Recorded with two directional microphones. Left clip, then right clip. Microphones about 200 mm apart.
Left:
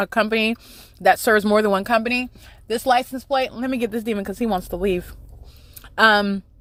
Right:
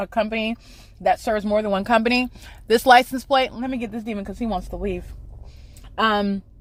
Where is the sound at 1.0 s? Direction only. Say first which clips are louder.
Left 5 dB; 25° left (ahead or behind).